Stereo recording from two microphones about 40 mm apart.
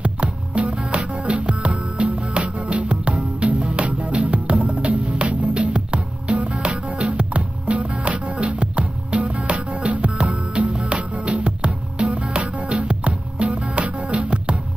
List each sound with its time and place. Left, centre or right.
0.0 s music: right